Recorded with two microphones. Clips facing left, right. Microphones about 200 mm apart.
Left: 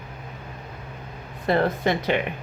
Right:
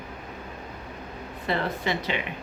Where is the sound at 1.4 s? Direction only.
50° left (ahead or behind).